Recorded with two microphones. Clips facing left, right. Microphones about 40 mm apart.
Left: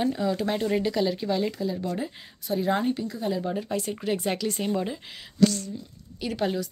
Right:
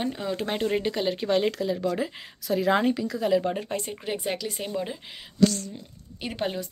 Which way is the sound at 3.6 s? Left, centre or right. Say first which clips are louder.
Left 2 dB; right.